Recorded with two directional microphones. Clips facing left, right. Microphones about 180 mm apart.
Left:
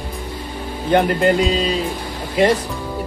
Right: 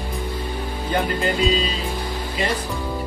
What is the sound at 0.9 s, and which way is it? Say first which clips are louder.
Speech: left 8 dB; 75° left (ahead or behind).